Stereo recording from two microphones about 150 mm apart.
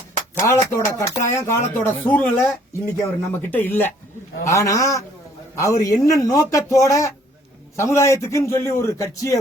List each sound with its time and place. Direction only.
0.4 s a man's voice: 20° left (ahead or behind)